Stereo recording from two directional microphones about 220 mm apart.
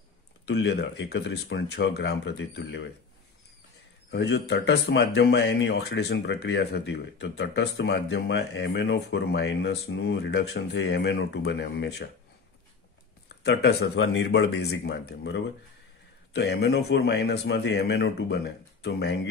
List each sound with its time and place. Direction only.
0.5 s speech: 50° left (ahead or behind)
4.1 s speech: 50° left (ahead or behind)
13.4 s speech: 50° left (ahead or behind)